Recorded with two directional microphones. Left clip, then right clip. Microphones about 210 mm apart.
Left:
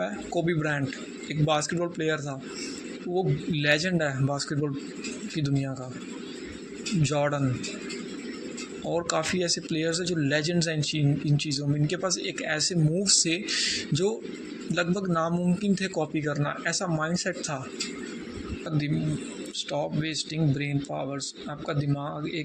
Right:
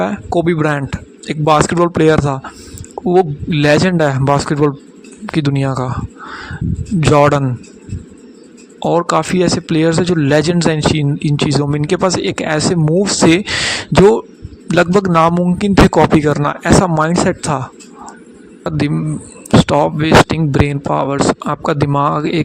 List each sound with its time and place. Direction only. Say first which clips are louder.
0.0 s speech: right 13 dB; 50° right (ahead or behind)
7.1 s speech: right 18 dB; 55° right (ahead or behind)
8.9 s a man's voice: right 14 dB; 50° right (ahead or behind)
19.6 s speech: right 17 dB; 55° right (ahead or behind)